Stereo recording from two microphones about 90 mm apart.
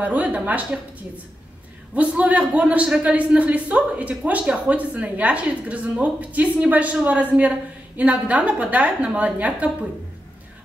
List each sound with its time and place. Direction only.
0.0 s a man's voice: 15° right (ahead or behind)
2.0 s a man's voice: 15° right (ahead or behind)